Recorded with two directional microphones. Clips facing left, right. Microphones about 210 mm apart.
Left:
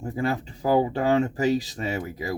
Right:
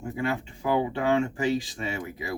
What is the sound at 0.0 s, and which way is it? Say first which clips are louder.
Speech: left 2 dB; 40° left (ahead or behind).